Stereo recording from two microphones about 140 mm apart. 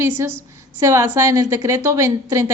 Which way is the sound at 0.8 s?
20° right (ahead or behind).